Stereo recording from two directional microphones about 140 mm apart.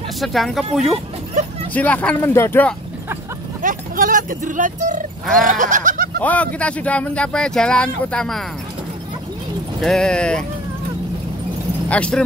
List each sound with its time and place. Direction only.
0.2 s speech: centre (ahead or behind)
1.7 s speech: 10° left (ahead or behind)
3.6 s speech: 75° right (ahead or behind)
5.2 s fowl: centre (ahead or behind)
5.5 s goat: 65° right (ahead or behind)
6.2 s speech: 10° left (ahead or behind)
9.8 s speech: 5° left (ahead or behind)
11.9 s speech: 10° left (ahead or behind)